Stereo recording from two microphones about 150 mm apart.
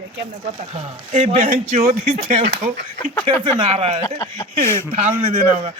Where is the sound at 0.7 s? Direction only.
45° right (ahead or behind).